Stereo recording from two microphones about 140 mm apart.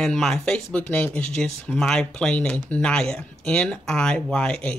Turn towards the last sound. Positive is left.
turn(degrees=5)  # may be behind; listen again after turning